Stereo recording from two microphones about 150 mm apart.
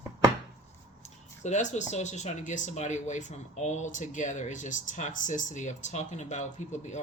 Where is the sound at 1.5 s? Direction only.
50° left (ahead or behind).